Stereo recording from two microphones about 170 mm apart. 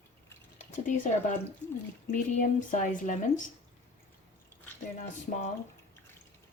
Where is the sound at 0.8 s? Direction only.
50° left (ahead or behind).